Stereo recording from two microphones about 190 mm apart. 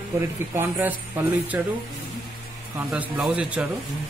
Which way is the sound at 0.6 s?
10° right (ahead or behind).